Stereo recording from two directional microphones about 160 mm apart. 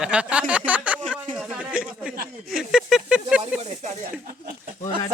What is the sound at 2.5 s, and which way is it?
Snake, centre (ahead or behind).